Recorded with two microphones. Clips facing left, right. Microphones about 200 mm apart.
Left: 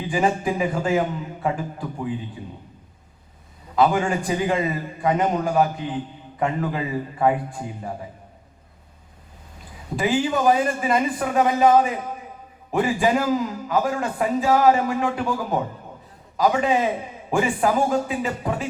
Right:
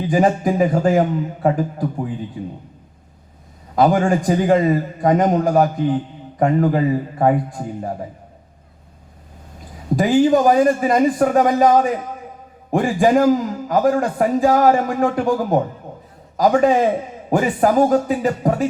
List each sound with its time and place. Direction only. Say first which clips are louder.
0.0 s a man's voice: right 5 dB; 45° right (ahead or behind)
3.8 s a man's voice: right 4 dB; 45° right (ahead or behind)
9.9 s a man's voice: right 8 dB; 45° right (ahead or behind)